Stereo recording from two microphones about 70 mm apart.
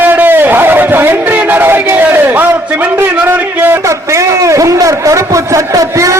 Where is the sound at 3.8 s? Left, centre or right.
Right.